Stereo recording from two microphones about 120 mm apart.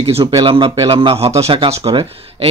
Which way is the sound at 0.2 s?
40° right (ahead or behind).